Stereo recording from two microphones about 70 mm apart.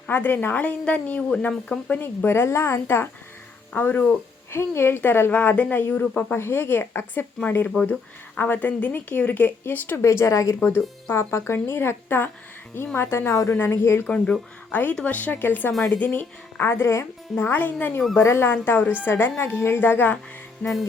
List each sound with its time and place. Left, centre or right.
0.1 s speech: left
1.9 s a woman's voice: left
4.5 s a woman's voice: left
8.4 s speech: left
10.0 s a woman's voice: left
10.6 s speech: left
11.1 s a woman's voice: left
14.7 s a woman's voice: left
17.3 s a woman's voice: left
18.5 s a woman's voice: left
20.6 s speech: centre